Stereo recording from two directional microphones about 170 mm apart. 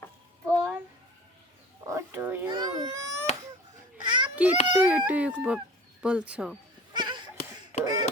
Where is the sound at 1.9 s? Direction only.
10° right (ahead or behind).